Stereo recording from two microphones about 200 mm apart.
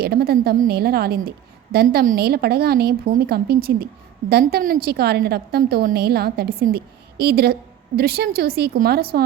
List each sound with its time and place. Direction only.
0.0 s a woman's voice: 50° right (ahead or behind)